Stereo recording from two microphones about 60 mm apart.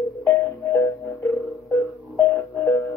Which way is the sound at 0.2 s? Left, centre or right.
Left.